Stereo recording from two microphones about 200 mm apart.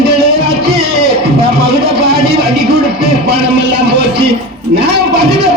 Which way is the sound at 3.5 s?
55° right (ahead or behind).